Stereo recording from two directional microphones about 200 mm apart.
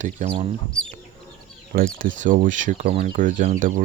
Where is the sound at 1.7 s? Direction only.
45° right (ahead or behind).